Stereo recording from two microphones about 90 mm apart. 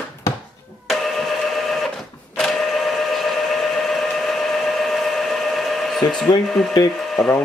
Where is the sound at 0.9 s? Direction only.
Centre (ahead or behind).